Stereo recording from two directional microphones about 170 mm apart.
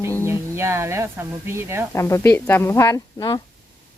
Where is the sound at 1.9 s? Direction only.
15° left (ahead or behind).